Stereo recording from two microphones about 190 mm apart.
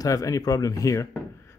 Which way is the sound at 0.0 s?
20° left (ahead or behind).